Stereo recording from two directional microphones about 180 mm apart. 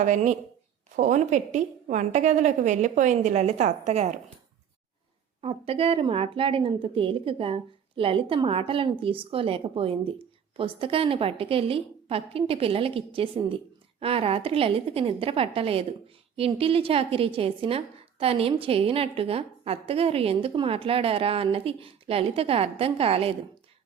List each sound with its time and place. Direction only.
0.0 s a woman's voice: 40° right (ahead or behind)
5.4 s a woman's voice: 35° right (ahead or behind)